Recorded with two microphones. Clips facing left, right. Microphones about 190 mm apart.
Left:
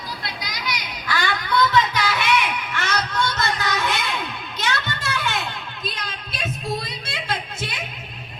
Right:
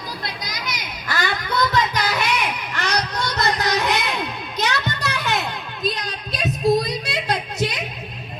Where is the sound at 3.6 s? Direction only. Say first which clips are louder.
Right 3 dB; 40° right (ahead or behind).